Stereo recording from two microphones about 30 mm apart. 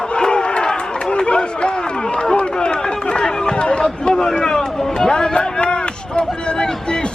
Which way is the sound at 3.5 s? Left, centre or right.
Left.